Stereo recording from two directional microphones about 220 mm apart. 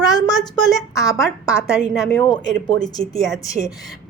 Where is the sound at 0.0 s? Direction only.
15° left (ahead or behind).